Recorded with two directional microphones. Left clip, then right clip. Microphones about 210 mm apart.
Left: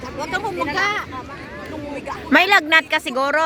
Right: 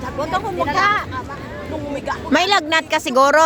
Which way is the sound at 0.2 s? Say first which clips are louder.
Right 2 dB; 40° left (ahead or behind).